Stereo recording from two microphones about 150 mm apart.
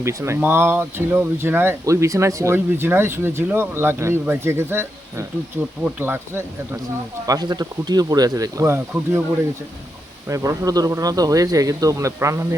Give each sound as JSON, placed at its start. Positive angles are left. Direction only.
{"t": 0.0, "sound": "speech", "side_deg": -20}
{"t": 7.3, "sound": "speech", "side_deg": -25}
{"t": 10.2, "sound": "speech", "side_deg": -20}